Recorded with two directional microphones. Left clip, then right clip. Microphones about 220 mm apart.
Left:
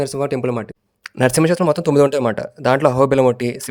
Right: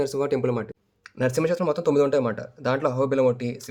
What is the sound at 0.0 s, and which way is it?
Speech, 30° left (ahead or behind).